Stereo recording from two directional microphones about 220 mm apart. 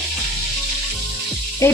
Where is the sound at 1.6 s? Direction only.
10° left (ahead or behind).